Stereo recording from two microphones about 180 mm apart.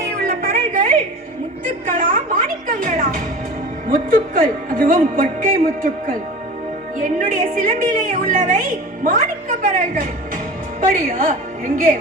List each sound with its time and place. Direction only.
0.3 s a sound: 50° right (ahead or behind)
1.9 s music: 50° right (ahead or behind)
3.8 s a woman's voice: 50° right (ahead or behind)